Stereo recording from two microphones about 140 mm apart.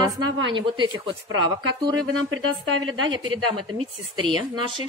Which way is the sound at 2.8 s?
30° right (ahead or behind).